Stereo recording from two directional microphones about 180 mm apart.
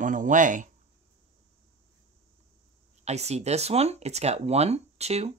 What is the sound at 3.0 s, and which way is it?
Speech, 35° right (ahead or behind).